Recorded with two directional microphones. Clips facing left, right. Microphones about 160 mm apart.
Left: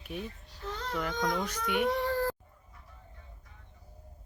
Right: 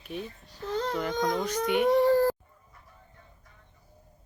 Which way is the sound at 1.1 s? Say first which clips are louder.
Right 3 dB; 30° right (ahead or behind).